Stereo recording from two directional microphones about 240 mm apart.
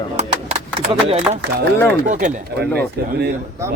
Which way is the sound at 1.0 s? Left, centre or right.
Right.